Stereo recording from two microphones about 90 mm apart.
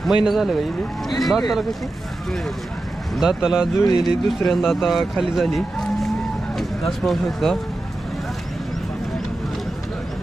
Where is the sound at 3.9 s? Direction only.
50° left (ahead or behind).